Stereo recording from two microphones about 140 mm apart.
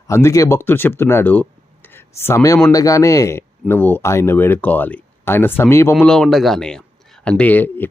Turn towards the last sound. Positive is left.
turn(degrees=15)  # may be behind; listen again after turning